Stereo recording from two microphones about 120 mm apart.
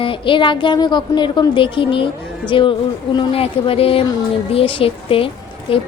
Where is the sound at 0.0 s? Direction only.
45° left (ahead or behind).